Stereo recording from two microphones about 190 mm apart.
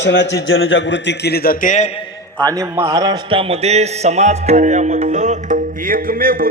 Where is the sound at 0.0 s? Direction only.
70° left (ahead or behind); by 1.9 s 40° left (ahead or behind).